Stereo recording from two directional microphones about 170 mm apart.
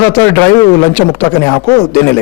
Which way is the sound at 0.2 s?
15° left (ahead or behind).